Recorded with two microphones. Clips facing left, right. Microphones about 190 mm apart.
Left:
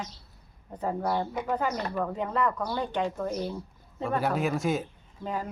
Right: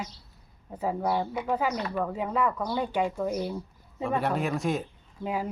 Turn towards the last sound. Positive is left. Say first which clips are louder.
# right 2 dB
turn(degrees=-10)  # may be behind; listen again after turning